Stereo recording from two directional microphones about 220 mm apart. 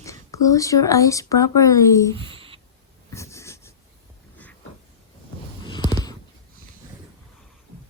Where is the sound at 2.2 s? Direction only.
25° right (ahead or behind).